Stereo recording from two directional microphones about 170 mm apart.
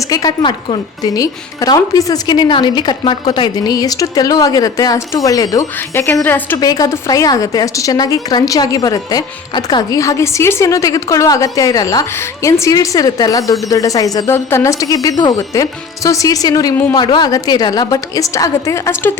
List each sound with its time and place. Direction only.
0.1 s a woman's voice: 20° left (ahead or behind)
6.6 s a woman's voice: 20° left (ahead or behind)